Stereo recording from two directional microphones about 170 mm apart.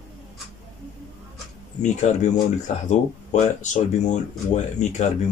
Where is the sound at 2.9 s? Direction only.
45° left (ahead or behind).